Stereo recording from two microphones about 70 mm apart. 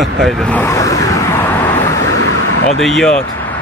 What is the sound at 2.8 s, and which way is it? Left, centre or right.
Speech, centre.